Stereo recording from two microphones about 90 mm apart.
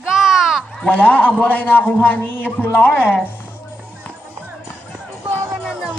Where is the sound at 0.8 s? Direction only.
15° left (ahead or behind).